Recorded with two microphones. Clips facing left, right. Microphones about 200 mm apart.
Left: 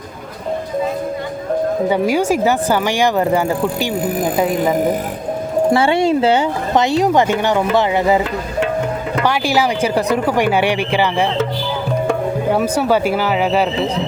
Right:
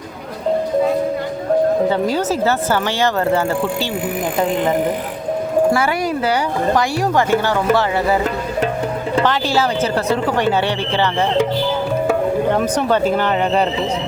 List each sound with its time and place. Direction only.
1.9 s speech: 10° left (ahead or behind)
5.7 s speech: 25° left (ahead or behind)
9.2 s speech: 10° left (ahead or behind)
12.5 s speech: 10° left (ahead or behind)